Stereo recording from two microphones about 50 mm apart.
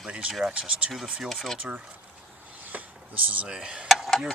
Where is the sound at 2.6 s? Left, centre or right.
Right.